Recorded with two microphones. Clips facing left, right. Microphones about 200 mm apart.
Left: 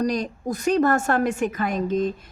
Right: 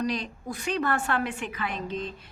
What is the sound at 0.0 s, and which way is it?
A woman's voice, 45° left (ahead or behind).